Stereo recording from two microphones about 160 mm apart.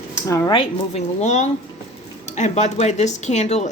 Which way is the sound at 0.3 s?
20° left (ahead or behind).